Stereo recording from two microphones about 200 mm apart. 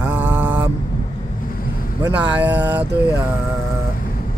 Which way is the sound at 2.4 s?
10° right (ahead or behind).